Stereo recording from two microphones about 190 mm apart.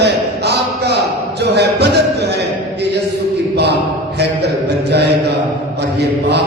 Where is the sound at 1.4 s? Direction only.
60° right (ahead or behind).